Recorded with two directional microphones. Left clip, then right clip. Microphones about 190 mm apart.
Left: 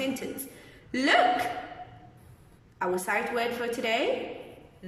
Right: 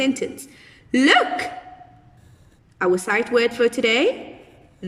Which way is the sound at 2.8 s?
55° right (ahead or behind).